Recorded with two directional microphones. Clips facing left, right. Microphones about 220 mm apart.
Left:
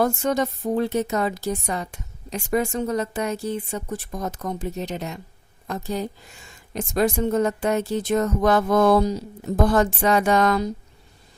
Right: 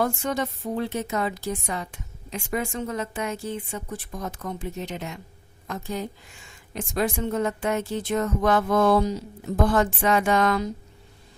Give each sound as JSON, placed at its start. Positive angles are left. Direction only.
{"t": 0.0, "sound": "a woman's voice", "side_deg": 40}